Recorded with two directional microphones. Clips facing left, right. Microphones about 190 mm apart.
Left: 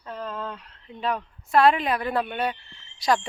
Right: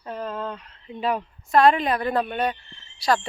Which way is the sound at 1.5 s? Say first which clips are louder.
Right 2 dB; 5° left (ahead or behind).